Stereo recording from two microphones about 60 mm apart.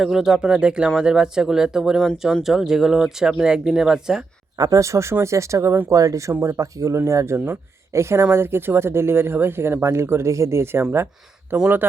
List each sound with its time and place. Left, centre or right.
0.0 s speech: centre
4.5 s speech: right
5.9 s speech: right
6.4 s speech: right
7.3 s speech: right